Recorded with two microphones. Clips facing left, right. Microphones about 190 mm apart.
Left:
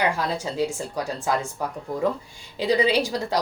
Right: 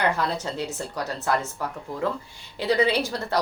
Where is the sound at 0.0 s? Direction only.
10° left (ahead or behind).